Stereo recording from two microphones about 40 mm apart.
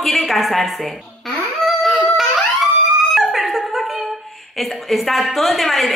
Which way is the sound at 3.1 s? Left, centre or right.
Centre.